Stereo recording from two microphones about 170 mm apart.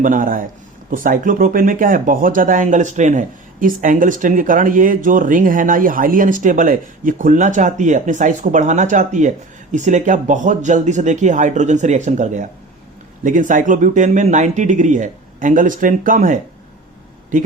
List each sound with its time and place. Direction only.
0.0 s speech: 50° right (ahead or behind)